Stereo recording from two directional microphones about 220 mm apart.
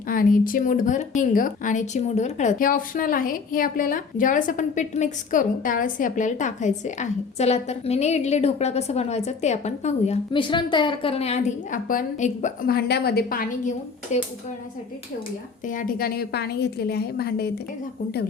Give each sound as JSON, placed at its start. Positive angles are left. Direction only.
{"t": 0.1, "sound": "speech", "side_deg": 40}
{"t": 15.6, "sound": "a woman's voice", "side_deg": 35}